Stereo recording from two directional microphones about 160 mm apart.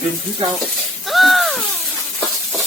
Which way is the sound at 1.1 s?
Centre (ahead or behind).